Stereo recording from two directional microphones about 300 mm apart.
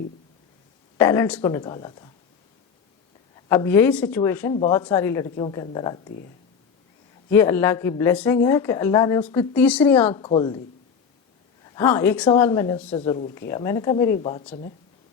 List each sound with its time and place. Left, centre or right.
0.9 s a woman's voice: centre
3.5 s a woman's voice: centre
7.3 s a woman's voice: centre
10.1 s a woman's voice: centre
11.7 s a woman's voice: centre